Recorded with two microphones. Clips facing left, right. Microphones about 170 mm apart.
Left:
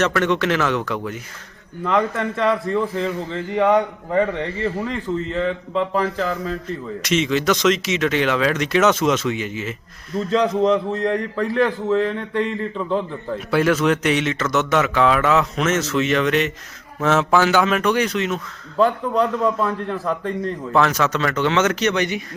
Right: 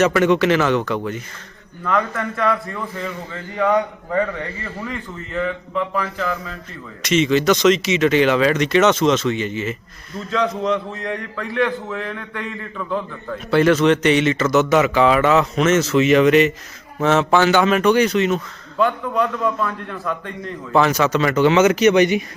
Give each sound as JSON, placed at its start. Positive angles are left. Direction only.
{"t": 0.0, "sound": "speech", "side_deg": -5}
{"t": 1.8, "sound": "a man's voice", "side_deg": 25}
{"t": 7.0, "sound": "speech", "side_deg": 0}
{"t": 10.3, "sound": "a man's voice", "side_deg": 35}
{"t": 11.9, "sound": "a man's voice", "side_deg": 30}
{"t": 13.5, "sound": "speech", "side_deg": 5}
{"t": 18.8, "sound": "a man's voice", "side_deg": 30}
{"t": 20.7, "sound": "speech", "side_deg": 0}